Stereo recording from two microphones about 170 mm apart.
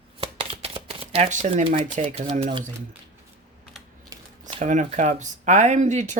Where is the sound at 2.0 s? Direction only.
35° right (ahead or behind).